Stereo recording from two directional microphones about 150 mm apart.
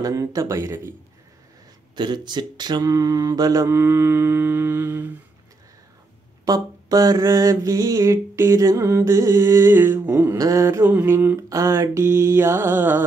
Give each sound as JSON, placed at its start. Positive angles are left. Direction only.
{"t": 0.0, "sound": "mantra", "side_deg": -25}
{"t": 2.0, "sound": "mantra", "side_deg": -30}
{"t": 6.4, "sound": "mantra", "side_deg": -25}